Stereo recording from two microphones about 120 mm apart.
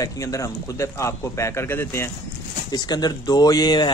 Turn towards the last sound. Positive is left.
turn(degrees=35)  # may be behind; listen again after turning